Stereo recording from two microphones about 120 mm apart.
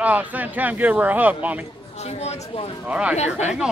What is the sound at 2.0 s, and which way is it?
Speech, 65° left (ahead or behind).